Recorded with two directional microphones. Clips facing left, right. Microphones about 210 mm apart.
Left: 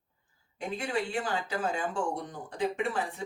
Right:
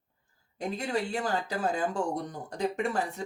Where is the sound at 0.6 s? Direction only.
40° right (ahead or behind).